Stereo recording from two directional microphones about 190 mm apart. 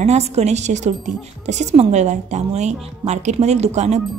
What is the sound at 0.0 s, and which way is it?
A woman's voice, 35° right (ahead or behind).